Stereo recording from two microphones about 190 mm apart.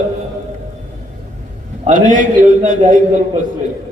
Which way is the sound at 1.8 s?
40° right (ahead or behind).